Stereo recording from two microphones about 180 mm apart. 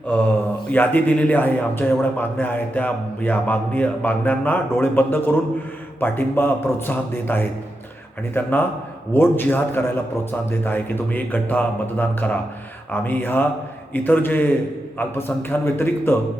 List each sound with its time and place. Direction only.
0.7 s a man's voice: 10° left (ahead or behind)